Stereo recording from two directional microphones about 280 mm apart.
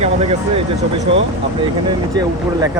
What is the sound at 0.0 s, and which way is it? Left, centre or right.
Speech, right.